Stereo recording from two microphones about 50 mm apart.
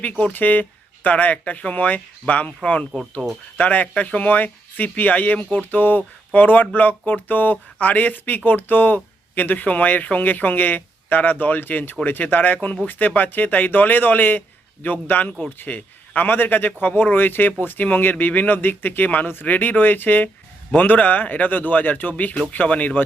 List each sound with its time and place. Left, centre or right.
0.0 s speech: left
3.6 s speech: left